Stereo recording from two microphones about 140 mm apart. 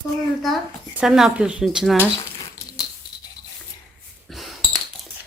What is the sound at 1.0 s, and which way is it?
Speech, 5° right (ahead or behind).